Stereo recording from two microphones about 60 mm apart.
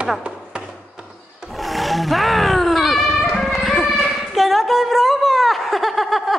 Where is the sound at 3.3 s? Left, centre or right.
Centre.